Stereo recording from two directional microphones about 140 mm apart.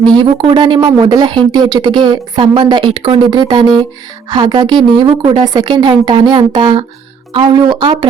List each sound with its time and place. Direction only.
0.2 s speech: 35° right (ahead or behind)